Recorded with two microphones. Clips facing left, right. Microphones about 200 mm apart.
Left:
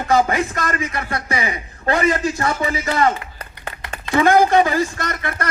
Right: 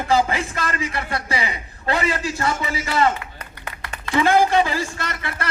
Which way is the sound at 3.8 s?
25° left (ahead or behind).